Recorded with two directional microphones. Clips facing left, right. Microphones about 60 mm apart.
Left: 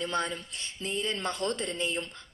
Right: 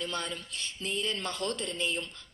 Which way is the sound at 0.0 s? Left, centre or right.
Left.